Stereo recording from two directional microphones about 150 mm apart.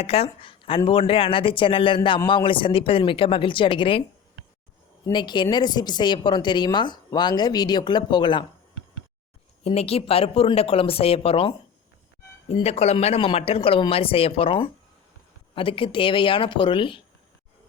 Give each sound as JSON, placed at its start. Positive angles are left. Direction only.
{"t": 0.0, "sound": "speech", "side_deg": 40}
{"t": 5.1, "sound": "a woman's voice", "side_deg": 30}
{"t": 9.6, "sound": "speech", "side_deg": 40}
{"t": 12.6, "sound": "speech", "side_deg": 45}